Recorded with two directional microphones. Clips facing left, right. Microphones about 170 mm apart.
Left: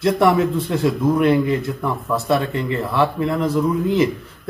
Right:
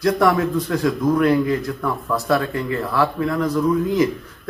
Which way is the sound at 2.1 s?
25° left (ahead or behind).